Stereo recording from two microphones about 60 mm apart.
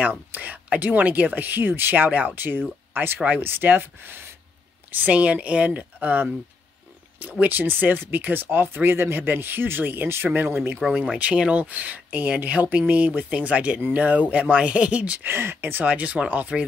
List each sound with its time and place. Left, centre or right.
0.0 s speech: right
2.9 s a sound: right
3.3 s speech: right
11.1 s speech: centre
15.2 s speech: right
15.8 s speech: right